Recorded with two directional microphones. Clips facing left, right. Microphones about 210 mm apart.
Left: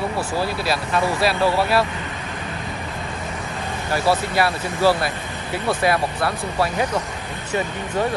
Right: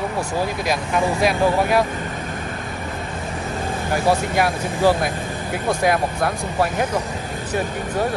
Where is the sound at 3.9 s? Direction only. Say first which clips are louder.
Right 1 dB; 15° right (ahead or behind).